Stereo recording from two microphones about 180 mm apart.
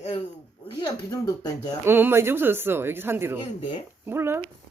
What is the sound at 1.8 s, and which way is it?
Speech, 10° right (ahead or behind).